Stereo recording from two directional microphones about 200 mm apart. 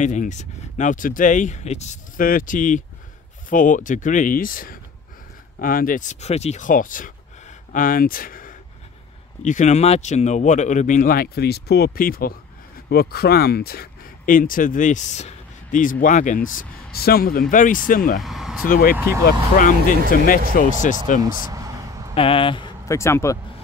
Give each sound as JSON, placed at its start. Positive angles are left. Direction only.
{"t": 0.0, "sound": "speech", "side_deg": 35}
{"t": 18.2, "sound": "speech", "side_deg": 0}
{"t": 18.7, "sound": "speech", "side_deg": 45}
{"t": 18.9, "sound": "speech", "side_deg": -15}
{"t": 19.5, "sound": "speech", "side_deg": 45}
{"t": 21.2, "sound": "a sound", "side_deg": -20}
{"t": 22.1, "sound": "speech", "side_deg": 30}